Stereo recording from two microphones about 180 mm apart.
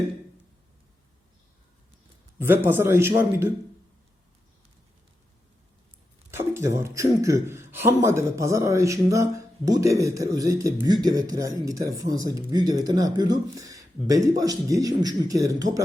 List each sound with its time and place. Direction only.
2.4 s a man's voice: 10° right (ahead or behind)
6.3 s a man's voice: 15° right (ahead or behind)